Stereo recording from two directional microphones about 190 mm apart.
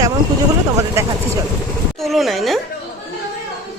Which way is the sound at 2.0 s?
Centre (ahead or behind).